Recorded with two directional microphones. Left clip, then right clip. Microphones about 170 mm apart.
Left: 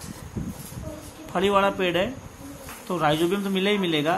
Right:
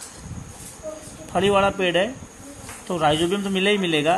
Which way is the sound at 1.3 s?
20° right (ahead or behind).